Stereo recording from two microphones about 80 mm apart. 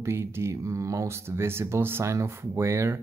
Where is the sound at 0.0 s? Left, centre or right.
Right.